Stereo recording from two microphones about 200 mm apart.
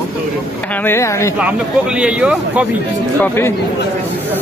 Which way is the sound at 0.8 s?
15° left (ahead or behind).